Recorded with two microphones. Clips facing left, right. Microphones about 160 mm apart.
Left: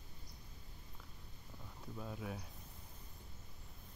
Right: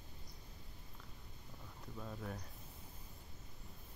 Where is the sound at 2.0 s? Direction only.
5° left (ahead or behind).